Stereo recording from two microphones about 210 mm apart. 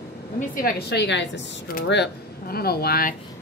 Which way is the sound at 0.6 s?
45° left (ahead or behind).